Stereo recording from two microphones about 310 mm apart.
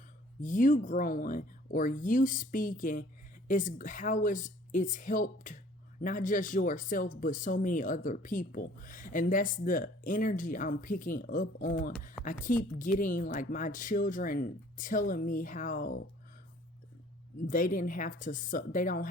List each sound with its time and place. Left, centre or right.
0.4 s speech: left
17.4 s speech: left